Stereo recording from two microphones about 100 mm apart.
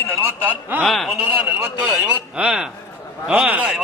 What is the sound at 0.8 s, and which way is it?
Speech, centre (ahead or behind).